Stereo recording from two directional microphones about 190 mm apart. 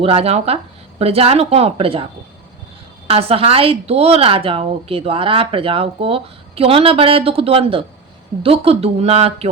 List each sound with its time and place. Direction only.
0.0 s speech: 30° right (ahead or behind)
3.1 s a woman's voice: 30° right (ahead or behind)